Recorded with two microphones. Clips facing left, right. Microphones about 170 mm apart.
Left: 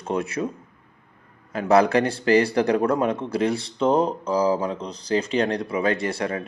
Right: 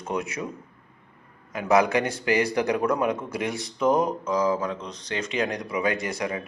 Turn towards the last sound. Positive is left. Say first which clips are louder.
# left 3 dB
turn(degrees=30)  # may be behind; listen again after turning